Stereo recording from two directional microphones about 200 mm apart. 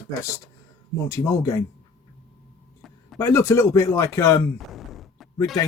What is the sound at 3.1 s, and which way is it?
Speech, 15° left (ahead or behind).